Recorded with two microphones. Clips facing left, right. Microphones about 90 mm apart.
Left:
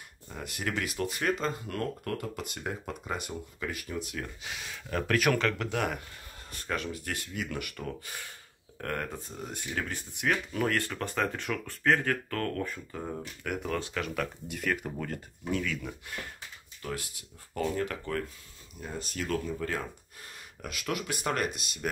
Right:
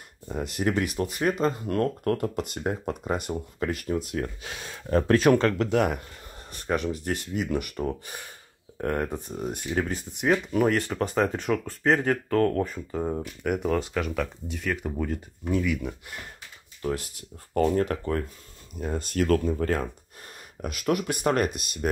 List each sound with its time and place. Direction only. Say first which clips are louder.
0.6 s speech: right 6 dB; 25° right (ahead or behind)
1.7 s speech: right 8 dB; 40° right (ahead or behind)
17.6 s speech: right 8 dB; 40° right (ahead or behind)
18.8 s speech: right 10 dB; 50° right (ahead or behind)